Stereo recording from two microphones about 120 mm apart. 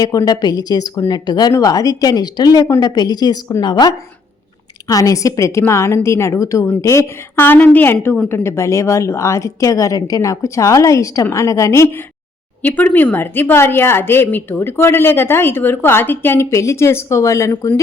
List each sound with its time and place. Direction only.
0.0 s a woman's voice: 35° left (ahead or behind)